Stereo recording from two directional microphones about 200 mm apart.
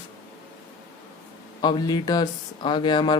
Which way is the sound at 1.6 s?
20° left (ahead or behind).